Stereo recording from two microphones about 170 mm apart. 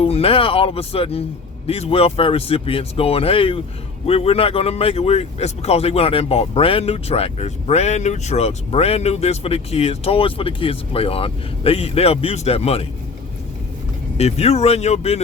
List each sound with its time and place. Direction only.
0.0 s speech: 35° left (ahead or behind)
14.2 s speech: 35° left (ahead or behind)